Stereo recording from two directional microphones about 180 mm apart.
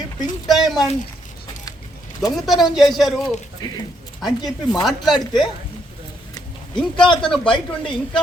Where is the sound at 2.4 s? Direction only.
Centre (ahead or behind).